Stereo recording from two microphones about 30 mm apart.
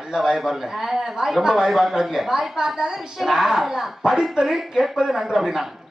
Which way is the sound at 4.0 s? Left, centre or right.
Right.